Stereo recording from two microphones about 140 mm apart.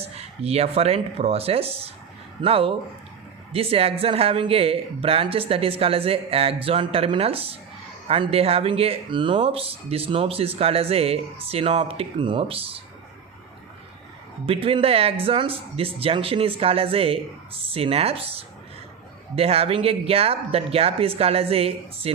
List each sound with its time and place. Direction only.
0.0 s speech: 45° right (ahead or behind)
14.4 s speech: 40° right (ahead or behind)